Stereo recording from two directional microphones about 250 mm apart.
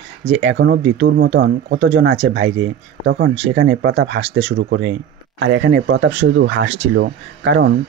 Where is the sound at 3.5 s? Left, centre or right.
Right.